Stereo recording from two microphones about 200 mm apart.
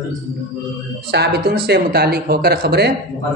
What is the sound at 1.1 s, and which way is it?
A man's voice, 55° right (ahead or behind).